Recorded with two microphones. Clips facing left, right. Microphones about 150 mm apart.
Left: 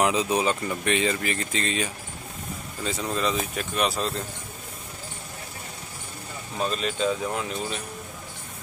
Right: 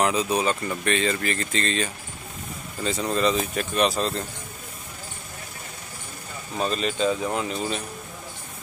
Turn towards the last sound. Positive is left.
turn(degrees=0)  # may be behind; listen again after turning